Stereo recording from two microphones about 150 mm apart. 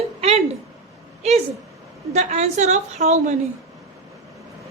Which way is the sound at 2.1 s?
50° right (ahead or behind).